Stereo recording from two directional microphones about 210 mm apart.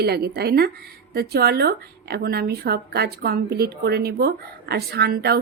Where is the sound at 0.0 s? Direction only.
50° right (ahead or behind).